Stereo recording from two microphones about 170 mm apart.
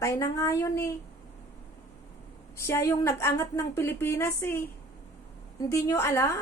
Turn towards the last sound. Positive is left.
turn(degrees=15)  # may be behind; listen again after turning